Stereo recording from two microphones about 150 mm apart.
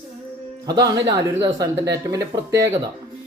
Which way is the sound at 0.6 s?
25° right (ahead or behind).